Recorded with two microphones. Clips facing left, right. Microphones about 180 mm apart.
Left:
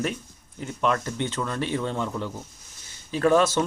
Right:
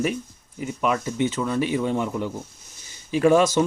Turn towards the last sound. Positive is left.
turn(degrees=-10)  # may be behind; listen again after turning